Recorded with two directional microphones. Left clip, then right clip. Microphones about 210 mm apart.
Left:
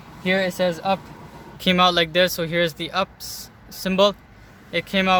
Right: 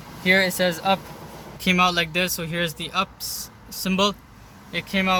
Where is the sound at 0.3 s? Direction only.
25° left (ahead or behind).